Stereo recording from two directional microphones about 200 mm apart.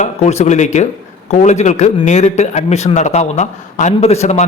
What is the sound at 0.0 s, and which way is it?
A man's voice, 35° left (ahead or behind).